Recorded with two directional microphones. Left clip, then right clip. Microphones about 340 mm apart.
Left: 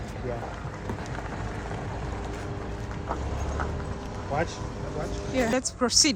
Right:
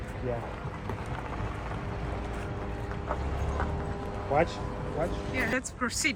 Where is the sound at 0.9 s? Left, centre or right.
Left.